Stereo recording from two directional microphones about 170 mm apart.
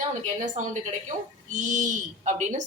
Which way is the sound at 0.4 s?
45° right (ahead or behind).